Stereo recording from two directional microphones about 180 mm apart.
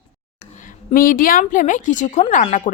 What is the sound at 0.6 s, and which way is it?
A woman's voice, 50° left (ahead or behind).